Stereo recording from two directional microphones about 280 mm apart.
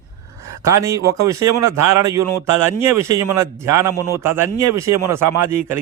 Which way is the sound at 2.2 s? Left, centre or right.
Right.